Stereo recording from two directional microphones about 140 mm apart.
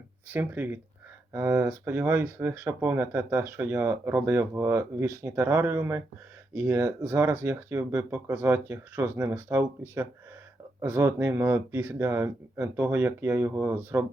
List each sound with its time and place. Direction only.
0.3 s speech: 15° right (ahead or behind)
10.8 s speech: 15° right (ahead or behind)